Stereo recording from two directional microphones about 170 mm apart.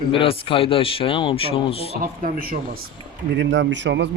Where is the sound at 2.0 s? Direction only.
60° right (ahead or behind).